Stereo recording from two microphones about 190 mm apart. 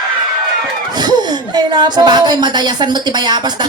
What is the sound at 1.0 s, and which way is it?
Speech, 20° right (ahead or behind).